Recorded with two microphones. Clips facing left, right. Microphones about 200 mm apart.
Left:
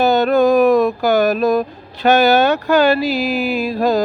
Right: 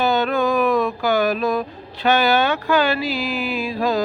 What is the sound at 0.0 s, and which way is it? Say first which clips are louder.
Music: left 6 dB; 40° left (ahead or behind).